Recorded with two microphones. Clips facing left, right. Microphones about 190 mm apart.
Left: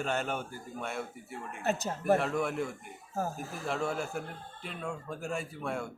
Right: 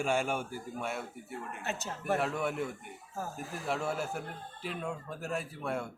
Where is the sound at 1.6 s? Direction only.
40° left (ahead or behind).